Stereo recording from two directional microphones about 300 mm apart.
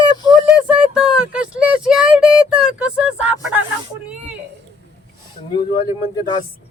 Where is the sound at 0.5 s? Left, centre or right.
Centre.